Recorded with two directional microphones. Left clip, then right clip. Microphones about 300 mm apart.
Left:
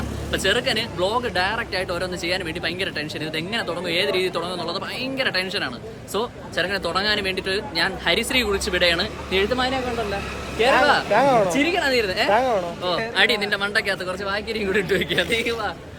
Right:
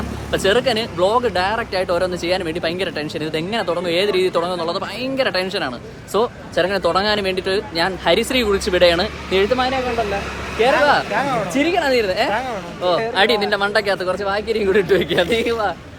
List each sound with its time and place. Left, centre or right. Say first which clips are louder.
0.3 s speech: right 5 dB; centre
11.1 s speech: left 3 dB; left
11.5 s speech: right 3 dB; centre
12.3 s speech: left 3 dB; left
12.8 s speech: right 7 dB; centre